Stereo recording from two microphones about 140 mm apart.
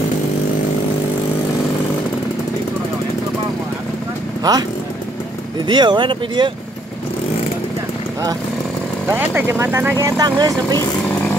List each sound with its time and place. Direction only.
4.4 s speech: 25° right (ahead or behind)
5.7 s speech: 35° right (ahead or behind)
9.0 s speech: 15° right (ahead or behind)